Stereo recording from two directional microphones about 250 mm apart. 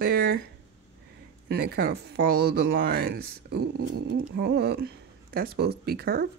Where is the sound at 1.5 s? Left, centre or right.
Right.